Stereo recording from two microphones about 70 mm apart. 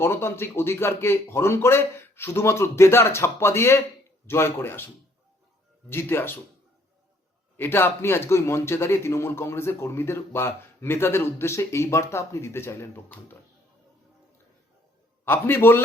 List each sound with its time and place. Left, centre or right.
0.0 s a man's voice: left
5.9 s a man's voice: left
7.5 s a man's voice: left
15.2 s a man's voice: left